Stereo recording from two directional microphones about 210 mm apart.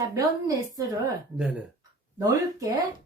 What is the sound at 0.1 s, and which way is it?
A woman's voice, 15° right (ahead or behind).